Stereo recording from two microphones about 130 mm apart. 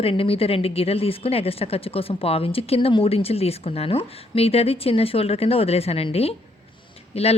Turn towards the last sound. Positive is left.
turn(degrees=50)  # may be behind; listen again after turning